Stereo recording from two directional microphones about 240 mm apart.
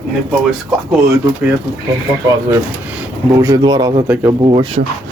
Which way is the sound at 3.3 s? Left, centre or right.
Centre.